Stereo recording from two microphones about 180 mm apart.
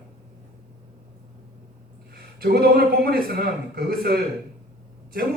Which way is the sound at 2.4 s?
60° right (ahead or behind).